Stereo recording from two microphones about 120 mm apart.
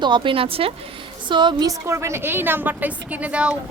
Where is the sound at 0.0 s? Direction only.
45° right (ahead or behind).